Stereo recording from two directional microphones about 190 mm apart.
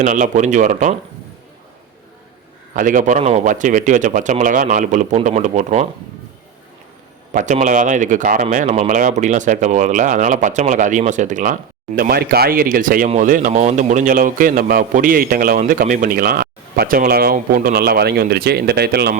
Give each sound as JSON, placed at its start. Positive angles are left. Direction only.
{"t": 0.0, "sound": "speech", "side_deg": -40}
{"t": 2.7, "sound": "speech", "side_deg": -45}
{"t": 7.3, "sound": "speech", "side_deg": -40}
{"t": 11.9, "sound": "a man's voice", "side_deg": -50}